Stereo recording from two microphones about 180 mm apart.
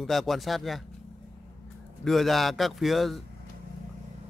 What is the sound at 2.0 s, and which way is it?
A man's voice, centre (ahead or behind).